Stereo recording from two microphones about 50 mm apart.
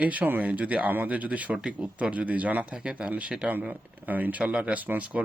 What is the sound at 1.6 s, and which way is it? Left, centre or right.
Speech, centre.